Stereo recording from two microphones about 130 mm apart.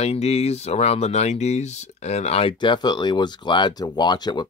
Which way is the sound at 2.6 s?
35° left (ahead or behind).